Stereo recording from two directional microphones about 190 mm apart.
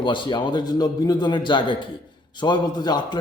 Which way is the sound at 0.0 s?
25° left (ahead or behind).